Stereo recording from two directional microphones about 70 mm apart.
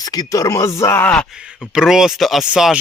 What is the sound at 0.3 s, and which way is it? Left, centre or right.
Speech, left.